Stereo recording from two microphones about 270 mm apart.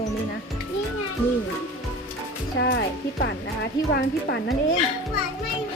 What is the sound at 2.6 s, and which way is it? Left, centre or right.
Speech, left.